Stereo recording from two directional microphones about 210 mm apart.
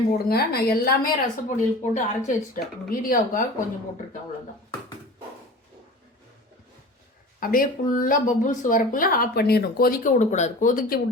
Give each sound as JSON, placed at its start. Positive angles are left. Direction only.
{"t": 0.3, "sound": "a woman's voice", "side_deg": 45}
{"t": 7.3, "sound": "speech", "side_deg": 40}